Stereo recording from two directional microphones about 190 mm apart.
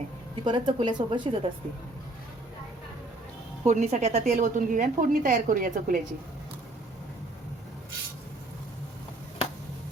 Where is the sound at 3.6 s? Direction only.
40° right (ahead or behind).